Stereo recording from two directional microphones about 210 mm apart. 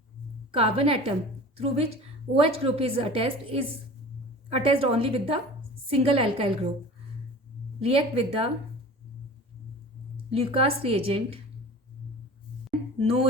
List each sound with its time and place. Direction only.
0.5 s a woman's voice: 25° right (ahead or behind)
7.8 s a woman's voice: 30° right (ahead or behind)
10.3 s a woman's voice: 25° right (ahead or behind)
13.0 s a woman's voice: 25° right (ahead or behind)